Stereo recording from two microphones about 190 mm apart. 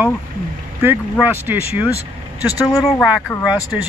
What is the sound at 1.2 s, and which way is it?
Speech, 10° right (ahead or behind).